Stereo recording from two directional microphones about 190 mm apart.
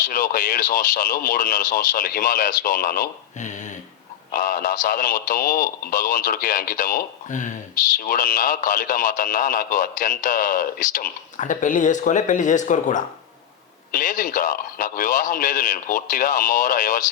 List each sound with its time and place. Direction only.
0.1 s speech: 45° left (ahead or behind)